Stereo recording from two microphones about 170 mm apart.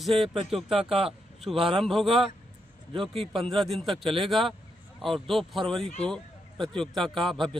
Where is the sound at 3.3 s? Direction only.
Centre (ahead or behind).